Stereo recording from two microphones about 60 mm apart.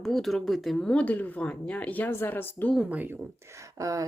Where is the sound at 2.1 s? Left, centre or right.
Left.